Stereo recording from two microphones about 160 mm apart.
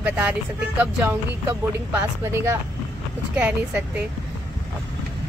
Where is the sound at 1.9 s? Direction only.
15° right (ahead or behind).